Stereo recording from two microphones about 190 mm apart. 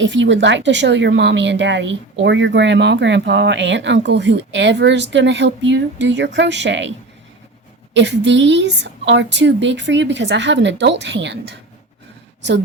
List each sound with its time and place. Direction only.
0.0 s speech: 75° right (ahead or behind)
7.9 s speech: 70° right (ahead or behind)